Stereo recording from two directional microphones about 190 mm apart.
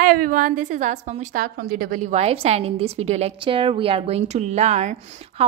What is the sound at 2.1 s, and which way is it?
A woman's voice, 35° right (ahead or behind).